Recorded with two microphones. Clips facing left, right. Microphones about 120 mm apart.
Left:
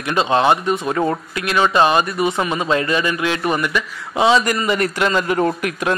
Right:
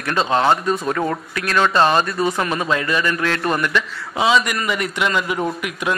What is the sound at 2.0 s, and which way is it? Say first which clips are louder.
A man's voice: left 1 dB; 20° left (ahead or behind).